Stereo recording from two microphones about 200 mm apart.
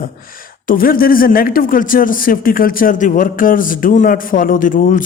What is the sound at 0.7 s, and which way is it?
Speech, 45° left (ahead or behind).